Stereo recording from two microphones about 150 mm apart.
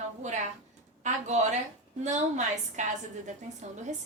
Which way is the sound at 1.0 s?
50° right (ahead or behind).